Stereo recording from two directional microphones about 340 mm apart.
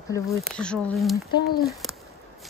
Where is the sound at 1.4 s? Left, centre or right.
Left.